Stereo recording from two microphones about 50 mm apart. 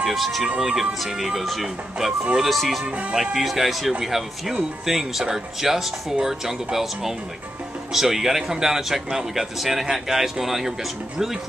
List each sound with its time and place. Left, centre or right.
0.0 s speech: centre
2.8 s music: centre
3.2 s speech: centre